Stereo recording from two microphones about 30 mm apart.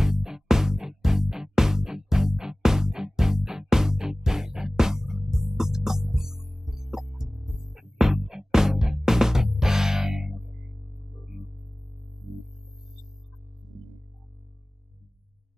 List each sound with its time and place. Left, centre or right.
0.0 s music: centre